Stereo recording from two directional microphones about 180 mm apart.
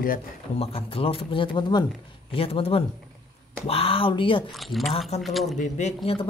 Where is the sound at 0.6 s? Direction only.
30° left (ahead or behind).